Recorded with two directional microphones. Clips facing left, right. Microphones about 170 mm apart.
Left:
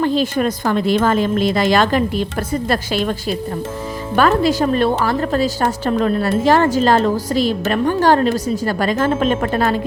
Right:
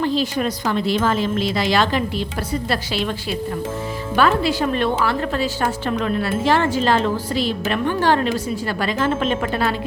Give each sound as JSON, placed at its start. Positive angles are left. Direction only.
{"t": 0.0, "sound": "speech", "side_deg": 50}